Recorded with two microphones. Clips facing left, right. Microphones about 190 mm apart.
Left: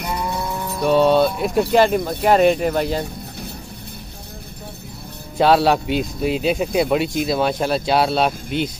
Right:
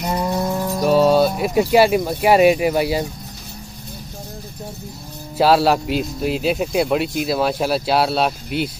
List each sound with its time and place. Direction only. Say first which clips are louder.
0.0 s mantra: right 4 dB; 55° right (ahead or behind)
0.8 s music: even; 5° right (ahead or behind)
1.4 s speech: right 1 dB; 5° right (ahead or behind)
5.4 s speech: even; centre (ahead or behind)